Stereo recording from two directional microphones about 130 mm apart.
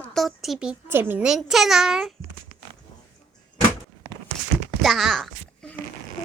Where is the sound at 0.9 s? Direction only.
15° right (ahead or behind).